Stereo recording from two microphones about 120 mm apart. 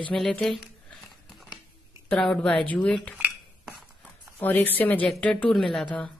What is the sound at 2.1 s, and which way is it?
Speech, 10° left (ahead or behind).